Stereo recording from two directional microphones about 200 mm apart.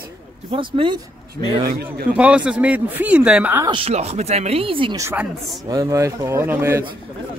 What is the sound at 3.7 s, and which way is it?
Speech, 30° right (ahead or behind).